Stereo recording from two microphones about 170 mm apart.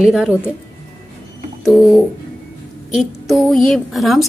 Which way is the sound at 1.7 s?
Centre (ahead or behind).